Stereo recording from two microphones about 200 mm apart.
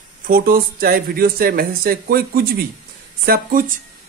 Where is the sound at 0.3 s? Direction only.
45° right (ahead or behind).